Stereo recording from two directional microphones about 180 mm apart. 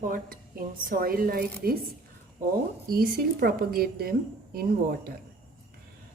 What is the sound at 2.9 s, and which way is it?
Speech, 55° right (ahead or behind).